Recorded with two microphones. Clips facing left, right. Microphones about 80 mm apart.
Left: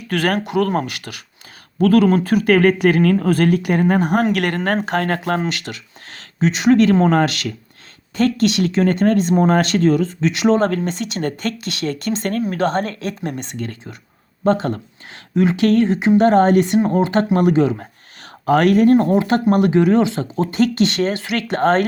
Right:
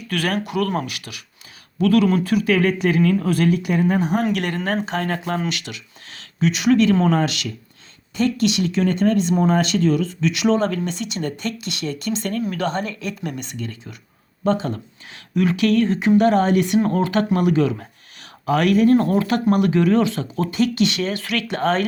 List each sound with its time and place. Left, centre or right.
0.1 s speech: left
3.2 s speech: left
5.4 s speech: left
12.5 s speech: left
15.4 s speech: left
16.8 s speech: left
18.2 s speech: left
18.9 s speech: left
21.2 s speech: left
21.4 s speech: left